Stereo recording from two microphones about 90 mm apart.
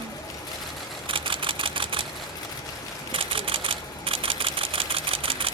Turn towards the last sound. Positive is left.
turn(degrees=-90)